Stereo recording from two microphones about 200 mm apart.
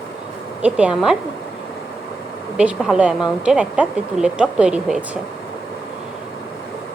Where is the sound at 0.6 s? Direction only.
5° right (ahead or behind).